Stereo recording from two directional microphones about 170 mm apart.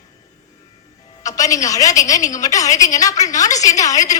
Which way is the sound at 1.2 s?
20° left (ahead or behind).